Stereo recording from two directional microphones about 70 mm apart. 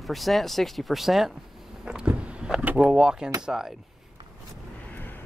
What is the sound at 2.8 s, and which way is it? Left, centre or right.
Speech, centre.